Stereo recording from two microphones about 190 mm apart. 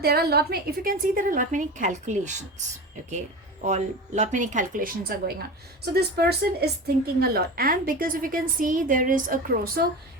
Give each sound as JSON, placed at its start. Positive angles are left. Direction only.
{"t": 0.0, "sound": "a woman's voice", "side_deg": -55}
{"t": 3.6, "sound": "a woman's voice", "side_deg": -40}